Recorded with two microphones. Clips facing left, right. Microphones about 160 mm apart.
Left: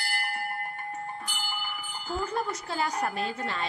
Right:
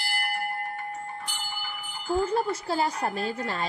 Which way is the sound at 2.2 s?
30° right (ahead or behind).